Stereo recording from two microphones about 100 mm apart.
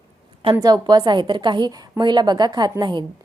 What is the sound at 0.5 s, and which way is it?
A woman's voice, 40° right (ahead or behind).